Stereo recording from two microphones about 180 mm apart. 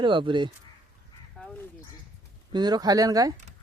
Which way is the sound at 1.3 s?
5° left (ahead or behind).